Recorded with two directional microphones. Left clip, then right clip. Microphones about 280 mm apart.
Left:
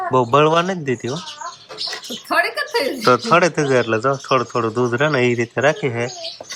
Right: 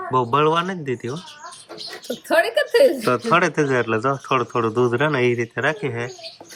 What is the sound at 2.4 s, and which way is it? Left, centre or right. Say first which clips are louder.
Speech: right 5 dB; right.